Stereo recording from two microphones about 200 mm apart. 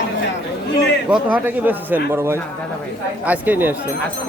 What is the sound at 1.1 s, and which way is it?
Speech, 10° right (ahead or behind).